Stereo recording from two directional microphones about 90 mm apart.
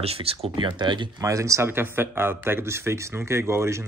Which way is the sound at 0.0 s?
90° right.